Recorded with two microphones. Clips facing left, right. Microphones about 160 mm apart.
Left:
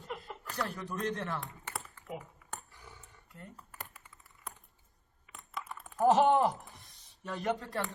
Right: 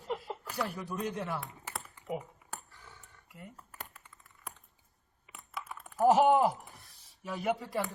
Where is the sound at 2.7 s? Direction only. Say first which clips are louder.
Left 1 dB; 15° left (ahead or behind).